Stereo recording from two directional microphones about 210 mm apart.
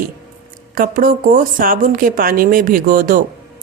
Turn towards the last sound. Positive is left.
turn(degrees=-40)  # may be behind; listen again after turning